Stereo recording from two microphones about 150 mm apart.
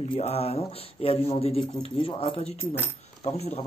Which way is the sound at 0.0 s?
45° left (ahead or behind).